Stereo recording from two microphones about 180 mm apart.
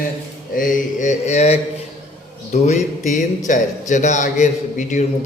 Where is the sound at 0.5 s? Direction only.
45° left (ahead or behind).